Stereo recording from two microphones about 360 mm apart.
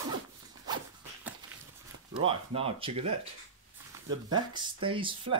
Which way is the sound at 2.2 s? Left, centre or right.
Centre.